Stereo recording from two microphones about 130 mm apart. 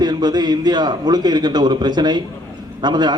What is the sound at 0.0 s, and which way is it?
A man's voice, 35° right (ahead or behind).